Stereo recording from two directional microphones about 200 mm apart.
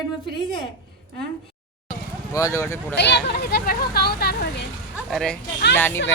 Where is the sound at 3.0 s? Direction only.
60° left (ahead or behind).